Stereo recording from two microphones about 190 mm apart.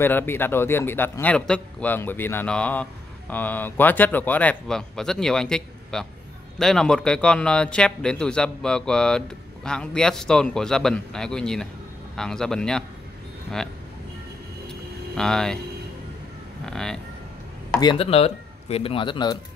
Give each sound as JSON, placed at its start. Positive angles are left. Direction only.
{"t": 0.0, "sound": "a man's voice", "side_deg": 10}
{"t": 14.7, "sound": "a sound", "side_deg": 5}
{"t": 16.6, "sound": "speech", "side_deg": 5}
{"t": 17.7, "sound": "speech", "side_deg": 25}